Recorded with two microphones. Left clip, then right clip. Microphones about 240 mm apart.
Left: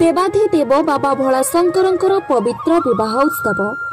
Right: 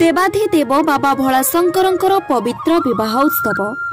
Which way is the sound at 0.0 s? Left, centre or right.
Right.